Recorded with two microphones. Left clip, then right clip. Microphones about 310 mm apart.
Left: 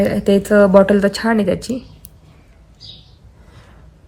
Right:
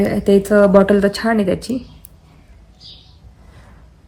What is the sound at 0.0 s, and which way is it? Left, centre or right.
Speech, centre.